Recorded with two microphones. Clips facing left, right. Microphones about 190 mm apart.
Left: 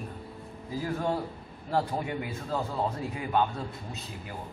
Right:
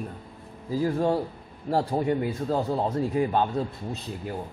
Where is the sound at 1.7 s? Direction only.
35° right (ahead or behind).